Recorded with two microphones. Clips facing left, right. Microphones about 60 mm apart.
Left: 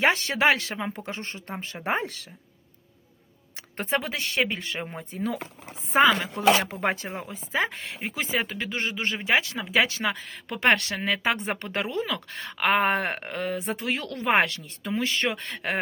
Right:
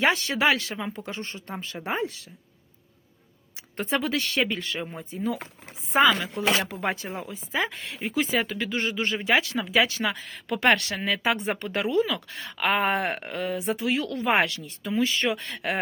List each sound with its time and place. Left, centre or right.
0.0 s speech: left
2.0 s a woman's voice: left
3.8 s speech: left
4.8 s speech: left